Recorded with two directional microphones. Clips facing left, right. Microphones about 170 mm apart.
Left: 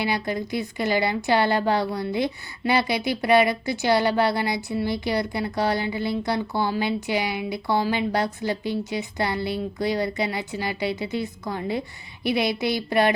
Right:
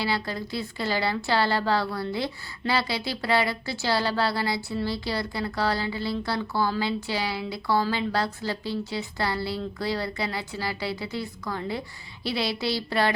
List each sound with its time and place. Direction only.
0.0 s a woman's voice: 20° left (ahead or behind)